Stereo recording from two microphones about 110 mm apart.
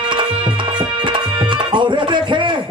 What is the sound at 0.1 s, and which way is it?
Tabla, 50° right (ahead or behind).